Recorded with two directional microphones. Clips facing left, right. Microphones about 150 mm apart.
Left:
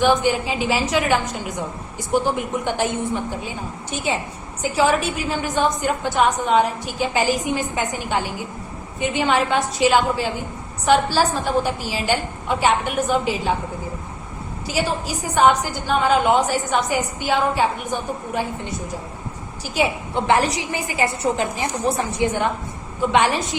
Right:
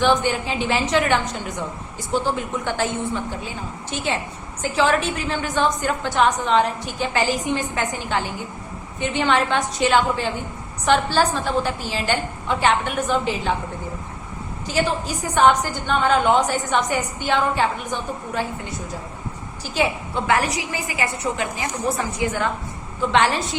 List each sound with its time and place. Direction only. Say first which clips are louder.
0.0 s a woman's voice: left 2 dB; 10° left (ahead or behind)
14.7 s a woman's voice: right 1 dB; 10° left (ahead or behind)
20.2 s a woman's voice: left 2 dB; 25° left (ahead or behind)